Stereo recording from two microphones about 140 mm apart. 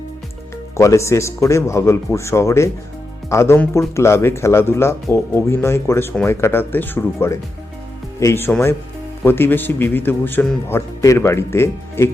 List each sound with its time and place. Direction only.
0.8 s a man's voice: 20° left (ahead or behind)